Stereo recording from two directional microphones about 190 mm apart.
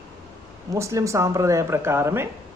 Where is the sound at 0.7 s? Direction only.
15° right (ahead or behind).